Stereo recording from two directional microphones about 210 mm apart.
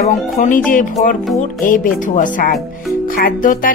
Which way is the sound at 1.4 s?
40° left (ahead or behind).